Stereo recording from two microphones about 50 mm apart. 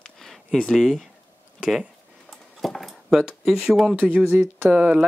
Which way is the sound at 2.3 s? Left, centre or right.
Centre.